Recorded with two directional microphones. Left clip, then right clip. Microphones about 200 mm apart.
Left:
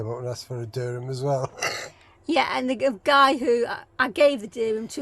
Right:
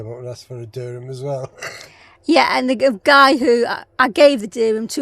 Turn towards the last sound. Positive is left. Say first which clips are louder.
# right 8 dB
turn(degrees=-40)  # may be behind; listen again after turning